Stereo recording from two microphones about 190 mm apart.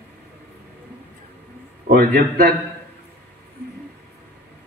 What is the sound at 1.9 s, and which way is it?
Speech, 50° right (ahead or behind).